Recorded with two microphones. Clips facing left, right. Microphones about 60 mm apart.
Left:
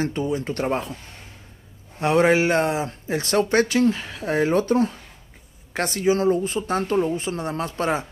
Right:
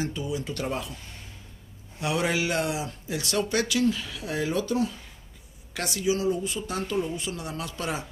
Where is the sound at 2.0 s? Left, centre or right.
Left.